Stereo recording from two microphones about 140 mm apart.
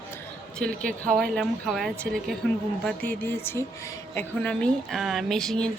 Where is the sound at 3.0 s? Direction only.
15° left (ahead or behind).